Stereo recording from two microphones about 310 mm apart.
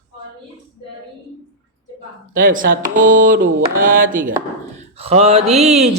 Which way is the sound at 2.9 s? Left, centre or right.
Right.